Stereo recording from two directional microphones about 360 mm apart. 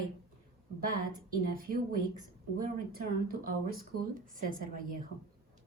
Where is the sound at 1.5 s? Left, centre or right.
Right.